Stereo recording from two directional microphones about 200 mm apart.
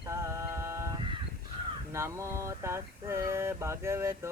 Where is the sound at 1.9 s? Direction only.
15° right (ahead or behind).